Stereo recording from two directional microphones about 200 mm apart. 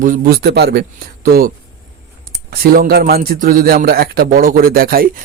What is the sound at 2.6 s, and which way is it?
A man's voice, 45° right (ahead or behind).